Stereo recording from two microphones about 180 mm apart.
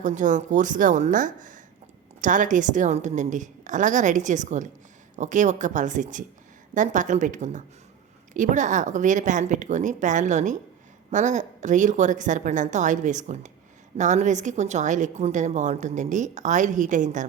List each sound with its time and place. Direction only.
0.0 s a woman's voice: 45° right (ahead or behind)